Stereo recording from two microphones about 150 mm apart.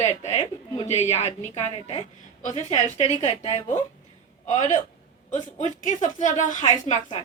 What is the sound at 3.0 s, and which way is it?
Speech, 25° right (ahead or behind).